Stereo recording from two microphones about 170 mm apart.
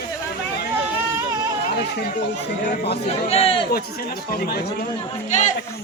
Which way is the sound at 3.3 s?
35° left (ahead or behind).